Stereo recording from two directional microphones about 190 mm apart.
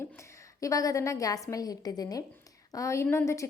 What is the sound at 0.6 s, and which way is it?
A woman's voice, 20° left (ahead or behind).